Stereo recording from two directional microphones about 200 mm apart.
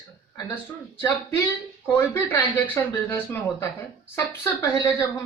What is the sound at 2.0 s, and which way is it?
Speech, 10° left (ahead or behind).